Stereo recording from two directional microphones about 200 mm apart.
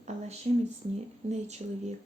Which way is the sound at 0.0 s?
35° right (ahead or behind).